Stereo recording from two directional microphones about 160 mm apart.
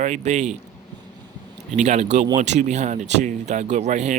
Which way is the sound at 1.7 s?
45° right (ahead or behind).